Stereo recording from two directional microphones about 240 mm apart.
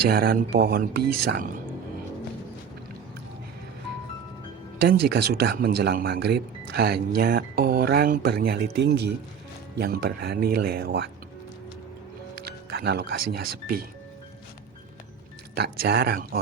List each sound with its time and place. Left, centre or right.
0.1 s speech: right
4.8 s speech: right
12.4 s speech: right
15.5 s speech: right